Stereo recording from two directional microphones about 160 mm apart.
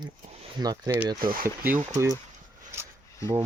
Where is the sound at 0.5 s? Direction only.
25° right (ahead or behind).